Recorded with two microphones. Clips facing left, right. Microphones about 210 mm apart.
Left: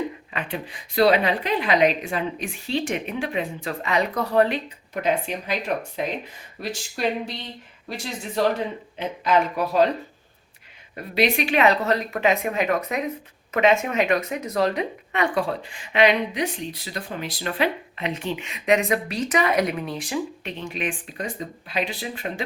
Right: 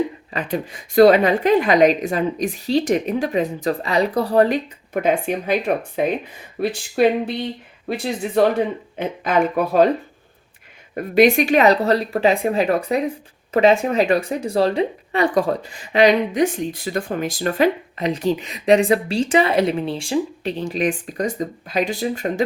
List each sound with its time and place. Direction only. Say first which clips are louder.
0.3 s a woman's voice: right 8 dB; 40° right (ahead or behind)
5.0 s speech: right 5 dB; 50° right (ahead or behind)
10.9 s a woman's voice: right 8 dB; 45° right (ahead or behind)